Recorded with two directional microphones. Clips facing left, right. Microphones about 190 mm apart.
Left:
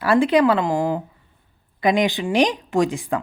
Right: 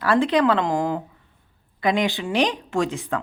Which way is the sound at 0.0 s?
10° left (ahead or behind).